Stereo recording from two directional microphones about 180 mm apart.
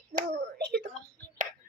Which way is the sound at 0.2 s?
65° right (ahead or behind).